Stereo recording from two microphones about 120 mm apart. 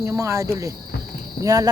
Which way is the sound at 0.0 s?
25° right (ahead or behind).